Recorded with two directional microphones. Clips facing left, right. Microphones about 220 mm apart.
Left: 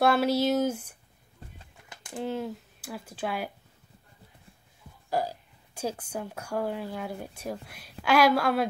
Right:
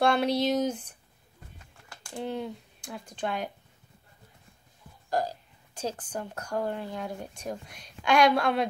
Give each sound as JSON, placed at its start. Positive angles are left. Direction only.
{"t": 0.0, "sound": "speech", "side_deg": 5}
{"t": 1.6, "sound": "bird", "side_deg": 20}
{"t": 2.1, "sound": "speech", "side_deg": 0}
{"t": 5.2, "sound": "speech", "side_deg": 10}